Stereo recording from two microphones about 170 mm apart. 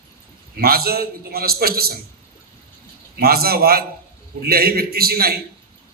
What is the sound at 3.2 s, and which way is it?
A man's voice, 65° right (ahead or behind).